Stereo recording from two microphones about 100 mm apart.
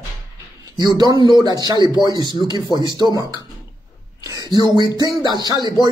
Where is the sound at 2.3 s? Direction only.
45° left (ahead or behind).